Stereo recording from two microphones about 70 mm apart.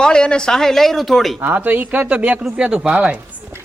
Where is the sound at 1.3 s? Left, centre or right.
Right.